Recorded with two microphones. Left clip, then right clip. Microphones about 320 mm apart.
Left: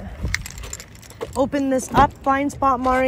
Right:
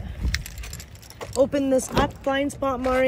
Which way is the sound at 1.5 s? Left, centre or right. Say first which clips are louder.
Left 1 dB; centre.